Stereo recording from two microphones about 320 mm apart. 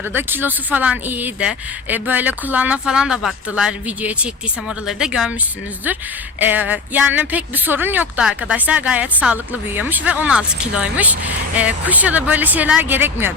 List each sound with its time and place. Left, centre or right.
0.1 s a woman's voice: centre
6.4 s a woman's voice: centre